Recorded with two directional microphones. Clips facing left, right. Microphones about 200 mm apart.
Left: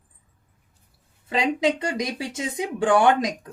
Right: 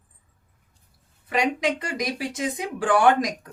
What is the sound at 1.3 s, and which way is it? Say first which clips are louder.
Speech: left 2 dB; 25° left (ahead or behind).